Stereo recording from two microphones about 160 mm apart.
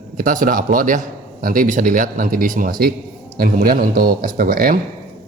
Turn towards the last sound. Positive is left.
turn(degrees=-65)  # may be behind; listen again after turning